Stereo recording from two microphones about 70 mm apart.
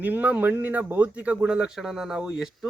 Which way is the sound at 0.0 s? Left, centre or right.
Right.